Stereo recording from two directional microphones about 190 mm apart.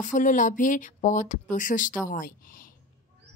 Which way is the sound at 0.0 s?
40° left (ahead or behind).